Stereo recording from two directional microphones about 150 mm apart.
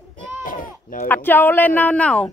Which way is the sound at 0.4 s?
65° left (ahead or behind).